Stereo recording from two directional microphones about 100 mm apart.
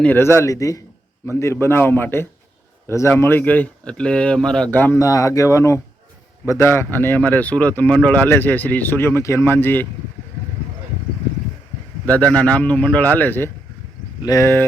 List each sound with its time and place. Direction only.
0.2 s a man's voice: 25° left (ahead or behind); by 4.7 s 5° left (ahead or behind)
4.7 s a man's voice: 20° left (ahead or behind)
4.9 s a man's voice: 35° left (ahead or behind)
12.0 s speech: 15° left (ahead or behind)
14.2 s speech: 35° left (ahead or behind)